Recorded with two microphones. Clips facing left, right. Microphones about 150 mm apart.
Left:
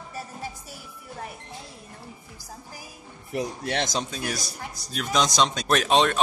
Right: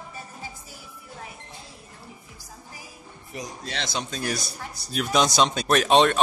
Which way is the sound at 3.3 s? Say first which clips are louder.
Left 7 dB; 60° left (ahead or behind).